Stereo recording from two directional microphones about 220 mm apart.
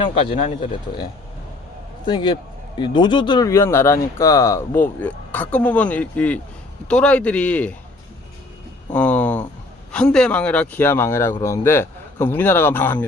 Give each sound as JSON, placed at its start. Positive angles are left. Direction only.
{"t": 0.0, "sound": "speech", "side_deg": 25}
{"t": 2.0, "sound": "a man's voice", "side_deg": 20}
{"t": 8.9, "sound": "a sound", "side_deg": 5}
{"t": 9.9, "sound": "a man's voice", "side_deg": 5}